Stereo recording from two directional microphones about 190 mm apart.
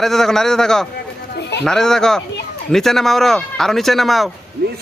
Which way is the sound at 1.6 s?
Centre (ahead or behind).